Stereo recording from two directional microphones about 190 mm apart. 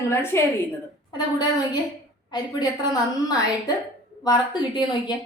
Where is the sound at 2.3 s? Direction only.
20° left (ahead or behind).